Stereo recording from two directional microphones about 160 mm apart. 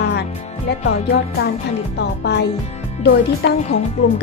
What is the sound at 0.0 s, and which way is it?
Music, 90° left.